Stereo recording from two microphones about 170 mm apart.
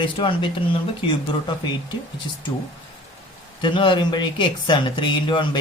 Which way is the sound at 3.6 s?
30° left (ahead or behind).